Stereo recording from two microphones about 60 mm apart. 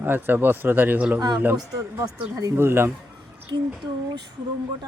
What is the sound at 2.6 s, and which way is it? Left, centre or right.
Speech, right.